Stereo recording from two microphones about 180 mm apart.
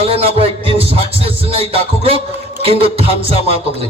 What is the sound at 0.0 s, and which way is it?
A man's voice, 35° right (ahead or behind).